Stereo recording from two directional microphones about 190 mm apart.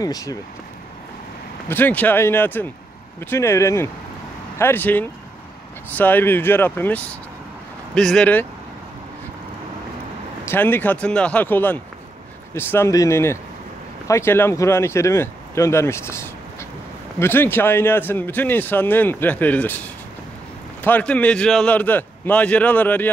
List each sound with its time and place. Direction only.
0.0 s speech: 20° left (ahead or behind)
1.7 s a man's voice: 10° left (ahead or behind)
10.4 s a man's voice: 10° left (ahead or behind)